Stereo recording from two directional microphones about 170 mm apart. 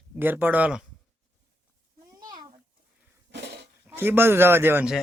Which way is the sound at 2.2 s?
25° right (ahead or behind).